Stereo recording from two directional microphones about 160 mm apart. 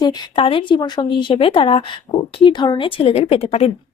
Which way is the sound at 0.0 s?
25° left (ahead or behind).